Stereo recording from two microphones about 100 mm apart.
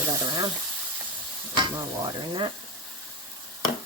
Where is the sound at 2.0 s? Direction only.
50° right (ahead or behind).